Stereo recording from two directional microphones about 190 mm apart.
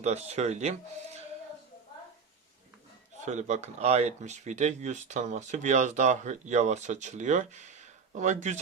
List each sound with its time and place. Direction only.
0.0 s speech: 35° right (ahead or behind)
3.2 s speech: 40° right (ahead or behind)